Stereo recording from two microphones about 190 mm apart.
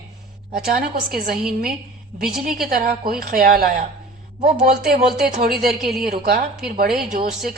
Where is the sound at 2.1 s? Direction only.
50° right (ahead or behind).